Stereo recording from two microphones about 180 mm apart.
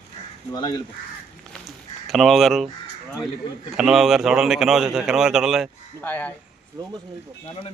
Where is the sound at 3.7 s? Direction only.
Centre (ahead or behind).